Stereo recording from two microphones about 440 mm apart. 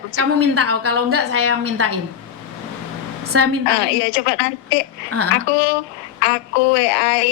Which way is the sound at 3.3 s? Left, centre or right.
Right.